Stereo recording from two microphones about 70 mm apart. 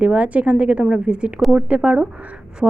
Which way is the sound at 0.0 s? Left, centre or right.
Right.